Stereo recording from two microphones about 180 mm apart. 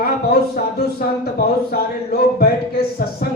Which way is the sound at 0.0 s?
60° left (ahead or behind).